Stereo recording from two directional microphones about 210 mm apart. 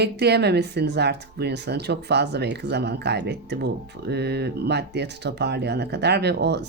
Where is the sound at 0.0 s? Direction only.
50° right (ahead or behind).